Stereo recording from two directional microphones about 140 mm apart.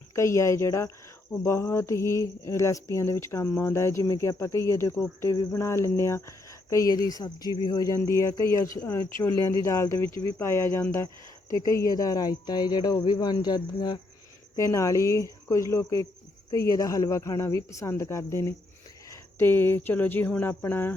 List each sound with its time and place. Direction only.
0.2 s speech: 20° left (ahead or behind)